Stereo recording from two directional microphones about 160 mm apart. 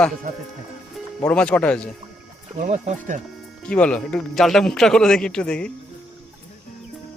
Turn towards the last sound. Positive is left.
turn(degrees=5)  # may be behind; listen again after turning